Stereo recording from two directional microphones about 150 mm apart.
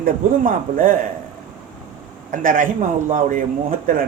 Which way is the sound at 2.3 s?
65° right (ahead or behind).